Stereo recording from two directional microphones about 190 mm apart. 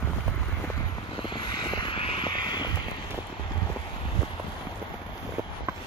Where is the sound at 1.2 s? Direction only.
25° left (ahead or behind).